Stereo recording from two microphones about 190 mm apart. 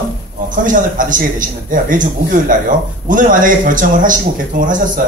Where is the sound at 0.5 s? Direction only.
45° right (ahead or behind).